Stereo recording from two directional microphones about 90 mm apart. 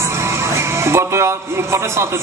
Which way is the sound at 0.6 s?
30° right (ahead or behind).